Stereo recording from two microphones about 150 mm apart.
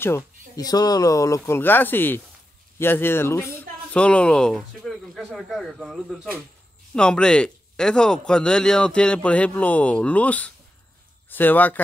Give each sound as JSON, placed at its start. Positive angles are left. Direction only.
{"t": 0.0, "sound": "a man's voice", "side_deg": 20}